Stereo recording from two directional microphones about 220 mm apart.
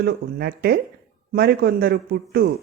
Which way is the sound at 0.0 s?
45° right (ahead or behind).